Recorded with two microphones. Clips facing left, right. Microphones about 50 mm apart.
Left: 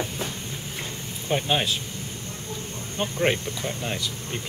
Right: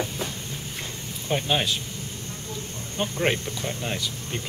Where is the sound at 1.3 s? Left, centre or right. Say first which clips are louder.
Left 1 dB; centre.